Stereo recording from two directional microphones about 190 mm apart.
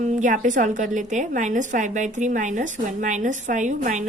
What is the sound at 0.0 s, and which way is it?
A woman's voice, 40° right (ahead or behind).